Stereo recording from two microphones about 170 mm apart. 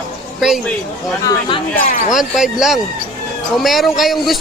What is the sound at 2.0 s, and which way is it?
Speech, centre (ahead or behind).